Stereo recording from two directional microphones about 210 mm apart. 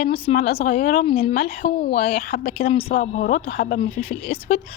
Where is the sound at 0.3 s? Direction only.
45° left (ahead or behind).